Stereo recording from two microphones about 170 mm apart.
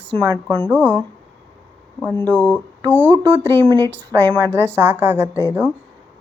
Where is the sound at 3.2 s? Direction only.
30° right (ahead or behind).